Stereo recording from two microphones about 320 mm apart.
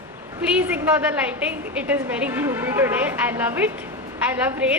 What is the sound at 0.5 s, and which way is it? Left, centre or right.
A woman's voice, centre.